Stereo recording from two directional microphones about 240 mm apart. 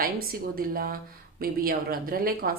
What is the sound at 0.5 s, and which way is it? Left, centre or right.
Speech, right.